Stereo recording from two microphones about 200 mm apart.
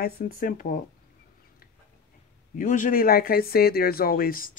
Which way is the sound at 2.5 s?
40° left (ahead or behind).